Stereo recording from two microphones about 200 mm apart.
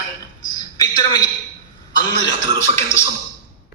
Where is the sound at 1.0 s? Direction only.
20° left (ahead or behind).